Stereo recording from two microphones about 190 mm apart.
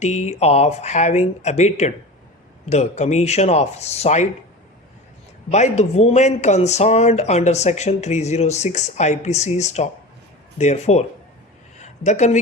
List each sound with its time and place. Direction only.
0.0 s speech: 35° left (ahead or behind)
5.5 s speech: 35° left (ahead or behind)